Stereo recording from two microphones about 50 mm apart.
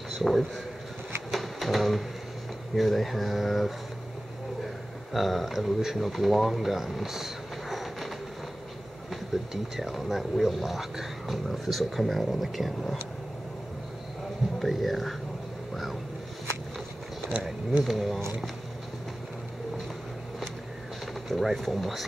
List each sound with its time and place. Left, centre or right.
0.2 s speech: centre
1.3 s printer: centre
2.7 s speech: centre
5.1 s speech: centre
9.1 s speech: centre
14.6 s speech: centre
15.7 s vehicle: centre
17.4 s speech: centre
21.3 s speech: centre